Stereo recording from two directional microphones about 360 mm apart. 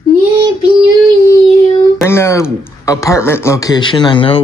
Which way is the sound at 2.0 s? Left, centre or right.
Centre.